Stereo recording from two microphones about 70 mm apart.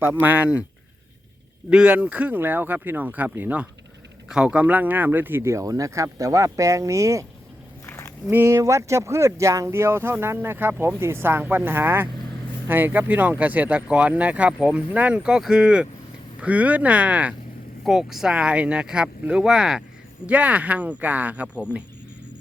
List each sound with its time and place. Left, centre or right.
0.0 s speech: right
1.7 s speech: centre
5.4 s speech: right
8.4 s speech: right; by 17.3 s centre
17.8 s speech: centre
20.2 s speech: centre